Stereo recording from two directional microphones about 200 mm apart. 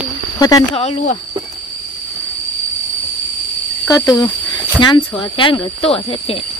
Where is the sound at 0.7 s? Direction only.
30° left (ahead or behind).